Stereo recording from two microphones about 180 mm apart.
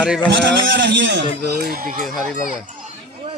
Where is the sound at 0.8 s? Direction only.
90° right.